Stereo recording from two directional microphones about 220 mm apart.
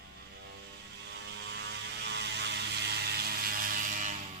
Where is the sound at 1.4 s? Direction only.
50° right (ahead or behind).